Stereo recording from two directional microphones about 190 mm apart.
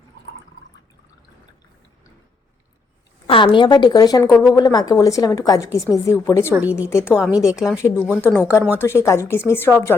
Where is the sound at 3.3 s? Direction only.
25° left (ahead or behind).